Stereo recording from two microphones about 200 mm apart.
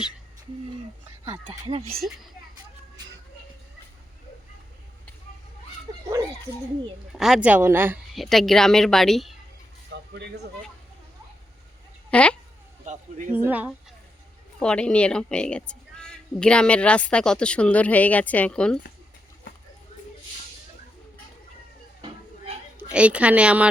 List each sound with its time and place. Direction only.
1.2 s speech: 25° right (ahead or behind)
7.1 s speech: 5° right (ahead or behind)
8.1 s a woman's voice: centre (ahead or behind)
9.9 s vehicle: 60° right (ahead or behind)
12.1 s a woman's voice: 5° left (ahead or behind)
12.8 s a sound: 35° right (ahead or behind)
13.3 s speech: 10° right (ahead or behind)
14.6 s a woman's voice: 5° left (ahead or behind)
22.9 s speech: 5° right (ahead or behind)